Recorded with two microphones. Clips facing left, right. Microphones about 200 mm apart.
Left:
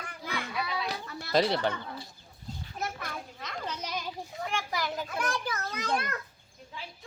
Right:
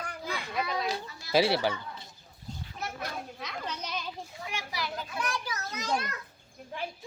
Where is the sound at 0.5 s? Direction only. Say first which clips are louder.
Right 4 dB; 45° right (ahead or behind).